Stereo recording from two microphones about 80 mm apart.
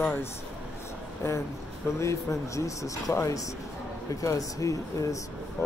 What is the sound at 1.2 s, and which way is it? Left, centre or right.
Speech, left.